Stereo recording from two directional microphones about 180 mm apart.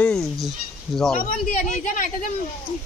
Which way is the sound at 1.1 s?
45° left (ahead or behind).